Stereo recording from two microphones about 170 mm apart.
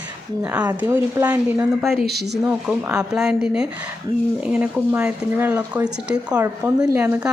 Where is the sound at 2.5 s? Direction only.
5° right (ahead or behind).